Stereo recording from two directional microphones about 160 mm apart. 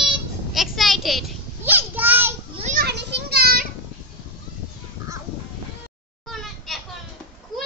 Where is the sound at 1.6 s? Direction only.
10° right (ahead or behind).